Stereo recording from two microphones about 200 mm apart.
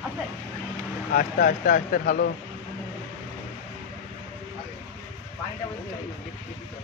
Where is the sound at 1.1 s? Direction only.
40° left (ahead or behind).